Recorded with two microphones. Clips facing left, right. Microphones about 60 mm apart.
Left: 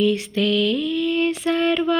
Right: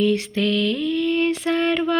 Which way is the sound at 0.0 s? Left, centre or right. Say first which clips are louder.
Even; right.